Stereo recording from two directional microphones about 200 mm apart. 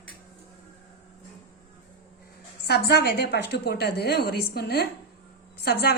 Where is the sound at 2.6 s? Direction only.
55° left (ahead or behind).